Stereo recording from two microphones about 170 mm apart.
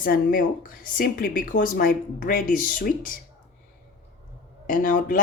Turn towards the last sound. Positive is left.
turn(degrees=55)  # may be behind; listen again after turning